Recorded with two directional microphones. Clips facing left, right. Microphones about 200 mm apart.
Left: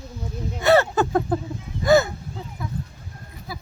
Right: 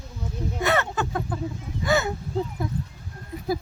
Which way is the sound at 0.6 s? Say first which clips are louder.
Left 8 dB; 35° left (ahead or behind).